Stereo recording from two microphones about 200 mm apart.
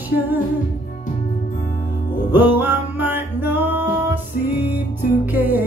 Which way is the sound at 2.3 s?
10° right (ahead or behind).